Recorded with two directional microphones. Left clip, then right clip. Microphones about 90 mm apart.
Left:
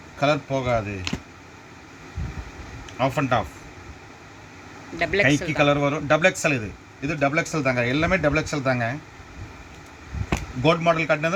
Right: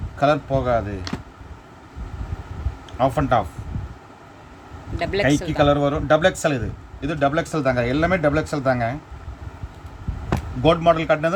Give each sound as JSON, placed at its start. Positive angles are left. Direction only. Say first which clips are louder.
{"t": 0.2, "sound": "a man's voice", "louder": "right 3 dB", "side_deg": -10}
{"t": 3.0, "sound": "a man's voice", "louder": "right 3 dB", "side_deg": -10}
{"t": 4.9, "sound": "a man's voice", "louder": "even", "side_deg": -10}
{"t": 7.6, "sound": "a man's voice", "louder": "right 4 dB", "side_deg": -15}
{"t": 10.3, "sound": "speech", "louder": "right 3 dB", "side_deg": -20}